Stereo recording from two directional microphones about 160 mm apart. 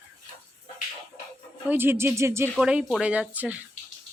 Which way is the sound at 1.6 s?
15° right (ahead or behind).